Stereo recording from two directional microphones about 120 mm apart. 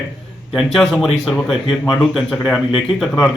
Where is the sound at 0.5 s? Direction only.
5° left (ahead or behind).